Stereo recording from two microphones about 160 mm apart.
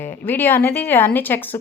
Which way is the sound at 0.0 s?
10° left (ahead or behind).